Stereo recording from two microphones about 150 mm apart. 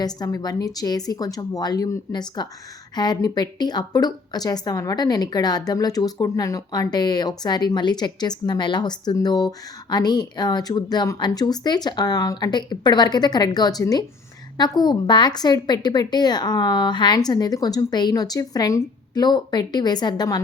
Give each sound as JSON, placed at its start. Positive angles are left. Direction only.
{"t": 0.0, "sound": "a woman's voice", "side_deg": 25}